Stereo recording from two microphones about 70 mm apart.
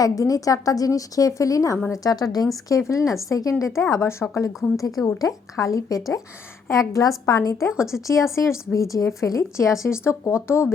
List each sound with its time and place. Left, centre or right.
0.0 s a woman's voice: left
2.6 s a woman's voice: left
3.8 s a woman's voice: left
7.9 s speech: left
8.4 s a woman's voice: left